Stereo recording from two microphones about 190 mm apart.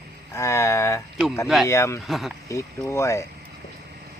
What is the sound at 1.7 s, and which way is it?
Speech, 15° left (ahead or behind).